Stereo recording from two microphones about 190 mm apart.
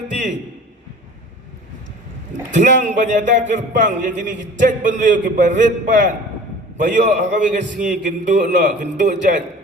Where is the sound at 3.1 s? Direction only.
40° right (ahead or behind).